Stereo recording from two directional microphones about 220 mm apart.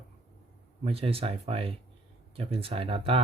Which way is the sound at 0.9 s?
25° right (ahead or behind).